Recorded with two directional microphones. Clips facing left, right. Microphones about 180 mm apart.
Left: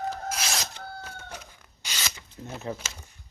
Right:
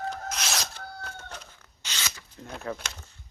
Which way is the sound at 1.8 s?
10° left (ahead or behind).